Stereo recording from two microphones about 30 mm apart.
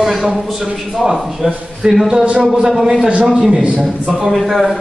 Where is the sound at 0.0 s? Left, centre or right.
Centre.